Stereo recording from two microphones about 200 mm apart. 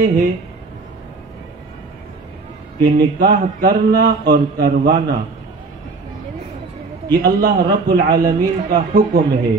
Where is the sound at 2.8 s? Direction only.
50° right (ahead or behind).